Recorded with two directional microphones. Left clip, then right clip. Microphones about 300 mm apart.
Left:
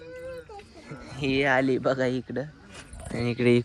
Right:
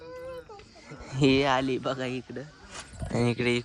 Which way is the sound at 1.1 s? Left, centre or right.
Right.